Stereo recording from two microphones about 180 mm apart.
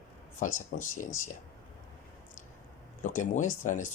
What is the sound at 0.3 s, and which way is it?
Speech, 45° left (ahead or behind).